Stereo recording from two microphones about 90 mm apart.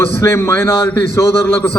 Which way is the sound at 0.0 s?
25° left (ahead or behind).